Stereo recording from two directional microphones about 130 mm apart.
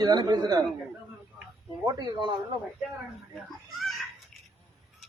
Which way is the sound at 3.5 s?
Centre (ahead or behind).